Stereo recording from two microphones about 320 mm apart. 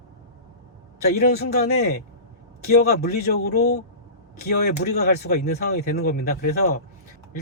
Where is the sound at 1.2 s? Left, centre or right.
Left.